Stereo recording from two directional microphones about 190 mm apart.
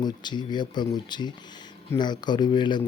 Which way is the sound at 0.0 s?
20° left (ahead or behind).